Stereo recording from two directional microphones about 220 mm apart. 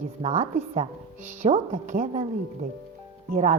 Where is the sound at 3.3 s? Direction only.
40° right (ahead or behind).